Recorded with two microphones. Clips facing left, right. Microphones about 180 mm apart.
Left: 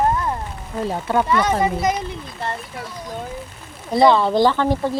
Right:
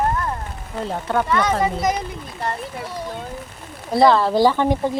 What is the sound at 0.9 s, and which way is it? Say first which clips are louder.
Speech: left 1 dB; 10° left (ahead or behind).